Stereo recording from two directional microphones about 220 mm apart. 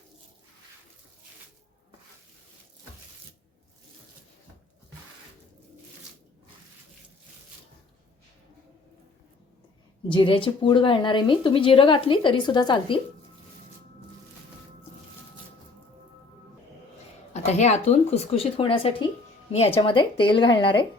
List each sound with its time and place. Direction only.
10.1 s a woman's voice: 20° left (ahead or behind)
17.3 s a woman's voice: 30° left (ahead or behind)